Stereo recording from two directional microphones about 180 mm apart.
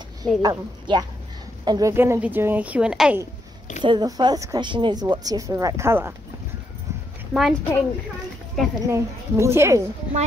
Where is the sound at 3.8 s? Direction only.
25° right (ahead or behind).